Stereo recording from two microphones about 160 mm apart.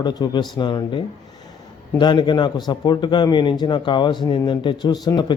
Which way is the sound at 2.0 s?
30° left (ahead or behind).